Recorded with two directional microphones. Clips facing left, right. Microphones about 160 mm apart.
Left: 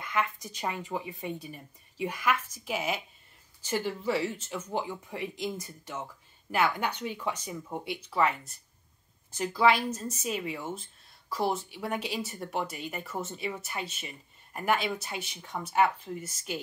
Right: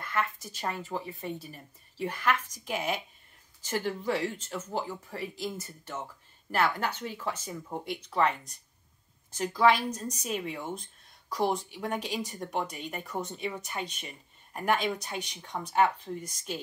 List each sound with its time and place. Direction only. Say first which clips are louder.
0.0 s a sound: left 1 dB; 15° left (ahead or behind)
0.6 s a woman's voice: left 1 dB; 15° left (ahead or behind)
9.6 s a woman's voice: even; 10° left (ahead or behind)